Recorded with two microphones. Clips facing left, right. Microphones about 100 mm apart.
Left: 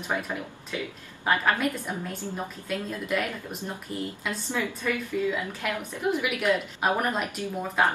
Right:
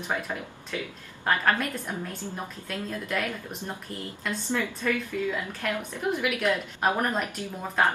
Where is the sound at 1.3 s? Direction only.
10° left (ahead or behind).